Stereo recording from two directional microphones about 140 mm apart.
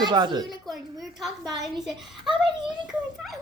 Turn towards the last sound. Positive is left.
turn(degrees=0)  # may be behind; listen again after turning